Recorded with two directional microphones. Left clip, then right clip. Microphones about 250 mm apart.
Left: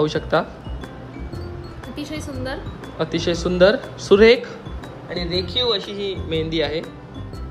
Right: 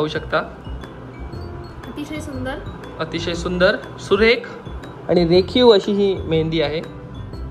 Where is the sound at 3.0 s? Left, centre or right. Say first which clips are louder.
Left 2 dB; centre.